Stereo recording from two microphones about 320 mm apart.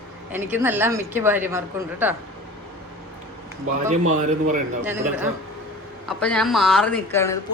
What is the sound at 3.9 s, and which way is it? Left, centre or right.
Speech, right.